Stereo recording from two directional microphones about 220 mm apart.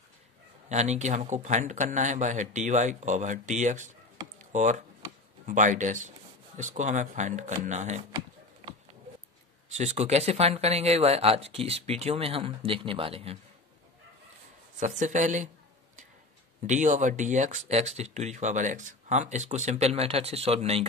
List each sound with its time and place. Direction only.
0.7 s speech: 30° right (ahead or behind)
4.4 s a sound: 35° right (ahead or behind)
5.5 s speech: 35° right (ahead or behind)
9.7 s speech: 30° right (ahead or behind)
14.8 s speech: 35° right (ahead or behind)
16.6 s speech: 35° right (ahead or behind)